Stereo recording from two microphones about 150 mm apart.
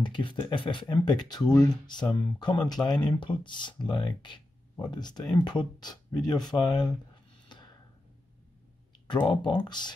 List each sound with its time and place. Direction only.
0.0 s speech: 30° left (ahead or behind)
7.4 s tick-tock: 30° left (ahead or behind)
9.0 s speech: 30° left (ahead or behind)